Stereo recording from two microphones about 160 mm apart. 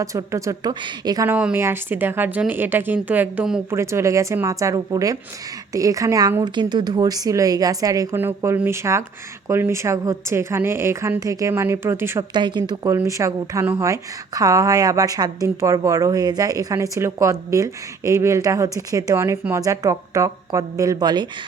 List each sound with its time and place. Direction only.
0.0 s a woman's voice: 20° right (ahead or behind)
1.3 s a woman's voice: 10° right (ahead or behind)
3.7 s a woman's voice: 15° right (ahead or behind)
12.3 s a woman's voice: 30° right (ahead or behind)